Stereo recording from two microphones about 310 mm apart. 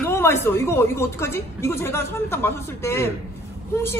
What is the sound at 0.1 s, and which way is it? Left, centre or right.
A woman's voice, centre.